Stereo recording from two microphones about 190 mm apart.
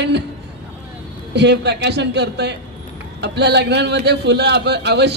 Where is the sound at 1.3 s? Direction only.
65° right (ahead or behind).